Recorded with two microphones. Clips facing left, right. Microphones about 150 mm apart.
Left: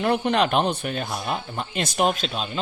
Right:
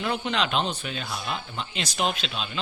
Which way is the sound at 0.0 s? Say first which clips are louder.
Left 6 dB; 55° left (ahead or behind).